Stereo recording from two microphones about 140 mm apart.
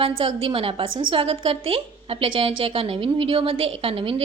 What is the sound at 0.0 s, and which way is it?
A woman's voice, 40° right (ahead or behind).